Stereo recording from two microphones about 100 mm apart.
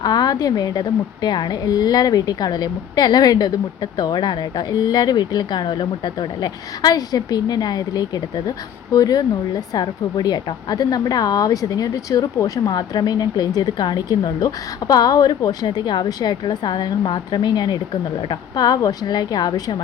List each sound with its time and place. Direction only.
0.0 s a woman's voice: 45° left (ahead or behind)